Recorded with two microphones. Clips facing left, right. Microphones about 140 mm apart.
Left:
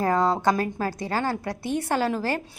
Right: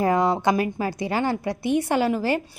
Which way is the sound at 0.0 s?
15° right (ahead or behind).